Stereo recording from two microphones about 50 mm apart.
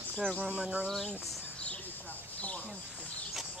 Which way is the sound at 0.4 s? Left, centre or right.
Right.